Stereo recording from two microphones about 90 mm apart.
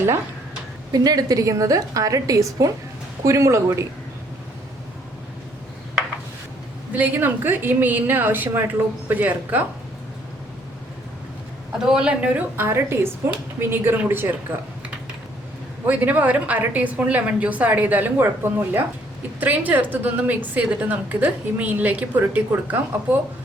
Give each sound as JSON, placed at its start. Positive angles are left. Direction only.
{"t": 0.9, "sound": "a woman's voice", "side_deg": -45}
{"t": 6.9, "sound": "a woman's voice", "side_deg": -20}
{"t": 11.8, "sound": "a woman's voice", "side_deg": -10}
{"t": 15.9, "sound": "a woman's voice", "side_deg": -20}